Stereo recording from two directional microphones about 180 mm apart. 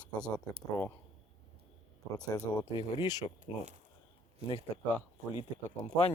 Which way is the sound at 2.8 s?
30° left (ahead or behind).